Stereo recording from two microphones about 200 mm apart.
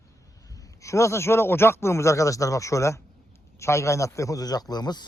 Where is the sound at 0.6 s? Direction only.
15° left (ahead or behind).